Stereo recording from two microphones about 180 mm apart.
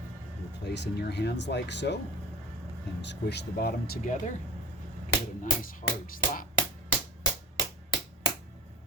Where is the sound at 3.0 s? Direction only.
75° left (ahead or behind); by 4.3 s 45° left (ahead or behind).